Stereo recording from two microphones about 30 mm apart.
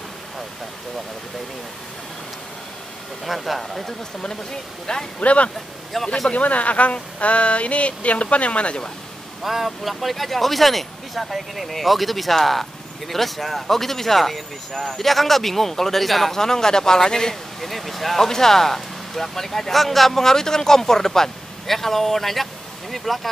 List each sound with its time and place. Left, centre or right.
3.3 s speech: centre
5.2 s speech: left
5.9 s speech: centre
6.3 s speech: left
9.4 s speech: centre
16.3 s a man's voice: centre
17.6 s speech: centre